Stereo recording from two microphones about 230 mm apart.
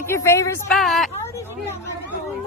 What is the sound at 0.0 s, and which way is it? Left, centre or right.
Speech, centre.